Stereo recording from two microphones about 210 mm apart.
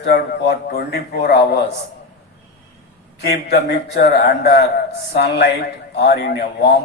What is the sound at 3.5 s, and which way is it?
Speech, 50° left (ahead or behind).